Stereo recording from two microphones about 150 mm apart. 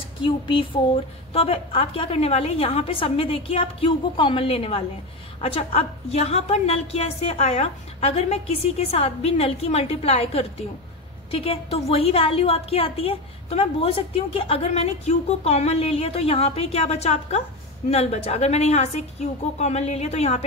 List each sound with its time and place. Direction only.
0.2 s a woman's voice: 35° left (ahead or behind)